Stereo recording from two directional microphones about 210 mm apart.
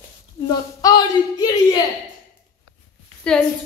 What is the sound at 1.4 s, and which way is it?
Speech, 20° left (ahead or behind).